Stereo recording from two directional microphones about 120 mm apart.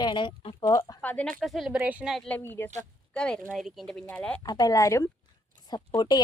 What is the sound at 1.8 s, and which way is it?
Speech, 10° right (ahead or behind).